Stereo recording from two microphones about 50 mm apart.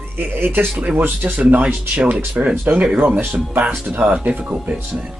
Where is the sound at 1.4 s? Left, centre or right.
Right.